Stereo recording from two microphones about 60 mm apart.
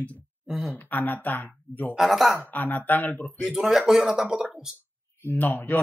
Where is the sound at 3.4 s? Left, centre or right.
Centre.